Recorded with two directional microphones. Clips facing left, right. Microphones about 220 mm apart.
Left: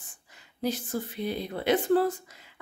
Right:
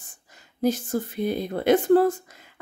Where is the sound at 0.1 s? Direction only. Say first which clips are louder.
Right 3 dB; 45° right (ahead or behind).